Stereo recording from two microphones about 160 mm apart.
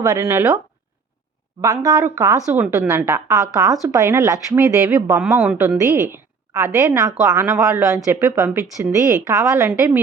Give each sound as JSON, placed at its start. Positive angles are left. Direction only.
{"t": 0.0, "sound": "a woman's voice", "side_deg": -20}
{"t": 1.6, "sound": "a woman's voice", "side_deg": -20}
{"t": 5.2, "sound": "speech", "side_deg": -5}
{"t": 6.5, "sound": "a woman's voice", "side_deg": -20}